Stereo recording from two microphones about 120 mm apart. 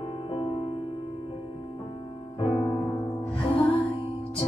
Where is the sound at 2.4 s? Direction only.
50° left (ahead or behind).